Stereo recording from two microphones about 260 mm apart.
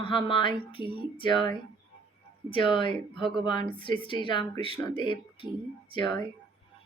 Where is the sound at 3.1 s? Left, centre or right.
Centre.